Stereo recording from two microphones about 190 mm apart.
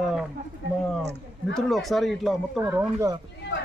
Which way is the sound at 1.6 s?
Centre (ahead or behind).